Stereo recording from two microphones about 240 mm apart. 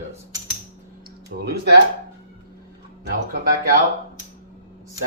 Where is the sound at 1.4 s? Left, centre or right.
Right.